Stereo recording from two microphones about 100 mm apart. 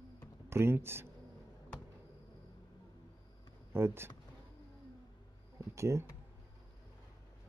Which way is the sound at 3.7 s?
25° right (ahead or behind).